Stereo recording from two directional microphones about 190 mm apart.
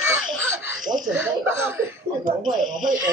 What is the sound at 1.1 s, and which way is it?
Speech, 90° right.